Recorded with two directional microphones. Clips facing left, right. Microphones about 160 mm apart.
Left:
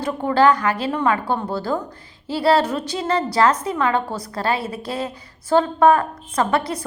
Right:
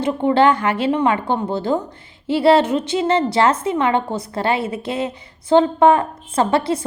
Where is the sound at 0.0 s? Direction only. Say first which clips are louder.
Right 2 dB; 25° right (ahead or behind).